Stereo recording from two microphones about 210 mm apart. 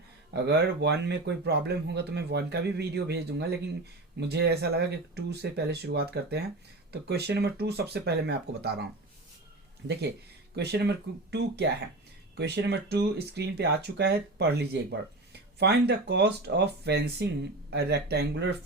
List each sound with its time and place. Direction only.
0.3 s speech: 50° right (ahead or behind)